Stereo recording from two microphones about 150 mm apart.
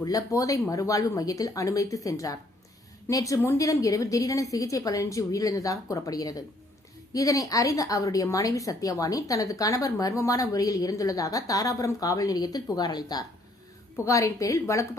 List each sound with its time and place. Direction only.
0.0 s a woman's voice: 25° left (ahead or behind)